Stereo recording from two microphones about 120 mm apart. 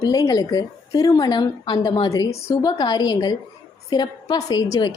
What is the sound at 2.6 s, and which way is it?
A woman's voice, 35° left (ahead or behind).